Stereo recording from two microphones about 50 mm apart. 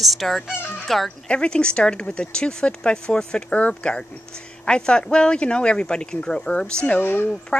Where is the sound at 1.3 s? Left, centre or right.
Centre.